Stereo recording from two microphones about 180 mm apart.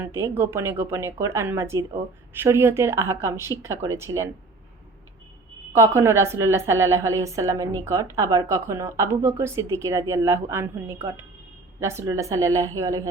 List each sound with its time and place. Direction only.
0.0 s a woman's voice: 15° right (ahead or behind)
5.7 s a woman's voice: 15° right (ahead or behind)